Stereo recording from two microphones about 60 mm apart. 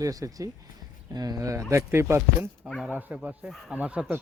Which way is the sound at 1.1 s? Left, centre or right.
Right.